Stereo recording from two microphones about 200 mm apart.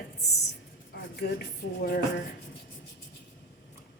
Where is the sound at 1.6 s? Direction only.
55° left (ahead or behind).